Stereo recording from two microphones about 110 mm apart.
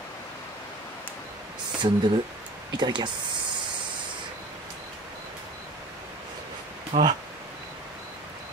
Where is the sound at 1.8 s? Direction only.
45° right (ahead or behind).